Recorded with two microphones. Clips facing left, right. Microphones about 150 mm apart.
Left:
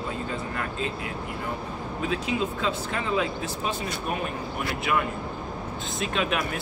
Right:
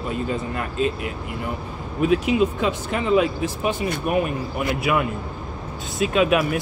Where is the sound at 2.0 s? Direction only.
15° right (ahead or behind).